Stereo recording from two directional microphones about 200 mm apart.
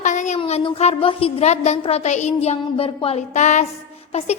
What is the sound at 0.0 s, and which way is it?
A woman's voice, 40° left (ahead or behind).